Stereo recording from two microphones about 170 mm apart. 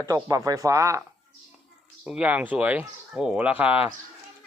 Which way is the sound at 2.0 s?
5° right (ahead or behind).